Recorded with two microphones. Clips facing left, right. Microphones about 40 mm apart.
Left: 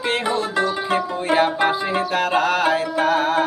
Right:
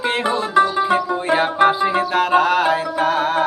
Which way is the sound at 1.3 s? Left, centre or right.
Centre.